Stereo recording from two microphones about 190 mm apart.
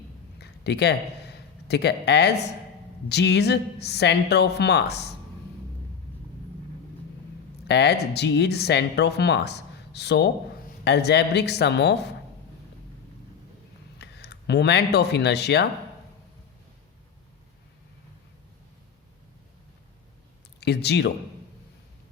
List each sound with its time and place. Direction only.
0.3 s a sound: 60° left (ahead or behind)
3.1 s speech: 60° left (ahead or behind)
7.7 s speech: 60° left (ahead or behind)
14.0 s speech: 60° left (ahead or behind)
20.6 s speech: 60° left (ahead or behind)